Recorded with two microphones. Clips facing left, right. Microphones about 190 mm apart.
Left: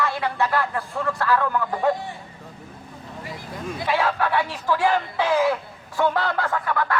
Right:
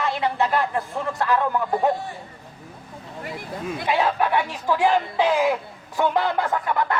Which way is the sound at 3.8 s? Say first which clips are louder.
Right 1 dB; 20° right (ahead or behind).